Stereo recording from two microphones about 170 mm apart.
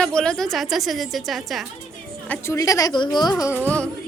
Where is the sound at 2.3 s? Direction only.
15° left (ahead or behind).